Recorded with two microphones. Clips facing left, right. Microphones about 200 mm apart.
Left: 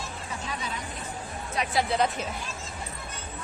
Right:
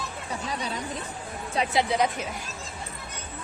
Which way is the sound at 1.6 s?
30° right (ahead or behind).